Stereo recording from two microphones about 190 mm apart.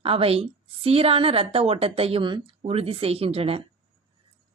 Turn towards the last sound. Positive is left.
turn(degrees=-30)  # may be behind; listen again after turning